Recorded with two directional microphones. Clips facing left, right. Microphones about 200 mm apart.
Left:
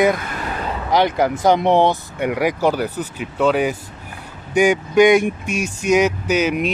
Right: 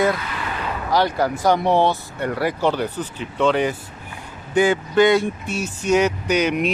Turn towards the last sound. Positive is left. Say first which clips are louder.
# left 1 dB
turn(degrees=5)  # may be behind; listen again after turning